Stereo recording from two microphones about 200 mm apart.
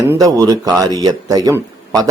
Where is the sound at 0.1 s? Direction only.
15° right (ahead or behind).